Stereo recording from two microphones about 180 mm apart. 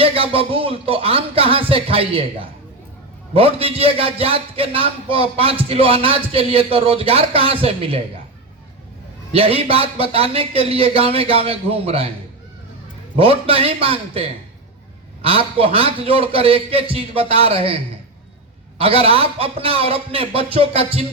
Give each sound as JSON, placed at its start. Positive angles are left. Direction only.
{"t": 0.0, "sound": "music", "side_deg": -30}
{"t": 3.3, "sound": "a man's voice", "side_deg": -30}
{"t": 9.3, "sound": "a man's voice", "side_deg": -30}
{"t": 13.1, "sound": "a man's voice", "side_deg": -30}